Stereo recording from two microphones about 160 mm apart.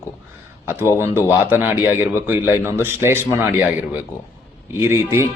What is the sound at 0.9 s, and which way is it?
Speech, 15° right (ahead or behind).